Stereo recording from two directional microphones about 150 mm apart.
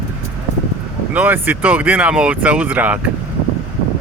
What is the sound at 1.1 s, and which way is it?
Speech, 10° right (ahead or behind).